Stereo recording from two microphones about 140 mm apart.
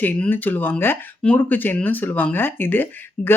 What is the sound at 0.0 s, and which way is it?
Speech, 15° left (ahead or behind).